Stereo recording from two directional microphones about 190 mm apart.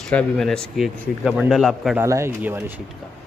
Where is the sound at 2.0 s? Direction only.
15° right (ahead or behind).